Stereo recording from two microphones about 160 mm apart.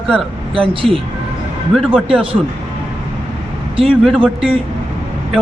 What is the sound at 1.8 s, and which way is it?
Speech, 5° right (ahead or behind).